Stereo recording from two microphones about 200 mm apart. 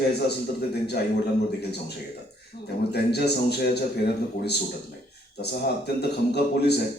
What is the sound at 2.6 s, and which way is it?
Speech, 55° left (ahead or behind).